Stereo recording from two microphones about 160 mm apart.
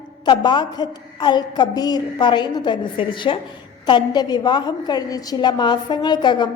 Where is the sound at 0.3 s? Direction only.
30° left (ahead or behind).